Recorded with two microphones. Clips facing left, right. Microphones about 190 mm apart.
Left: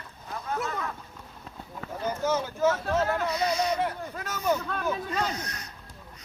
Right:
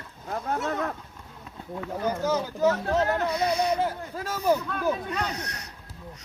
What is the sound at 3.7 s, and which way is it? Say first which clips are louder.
Speech: right 2 dB; 30° right (ahead or behind).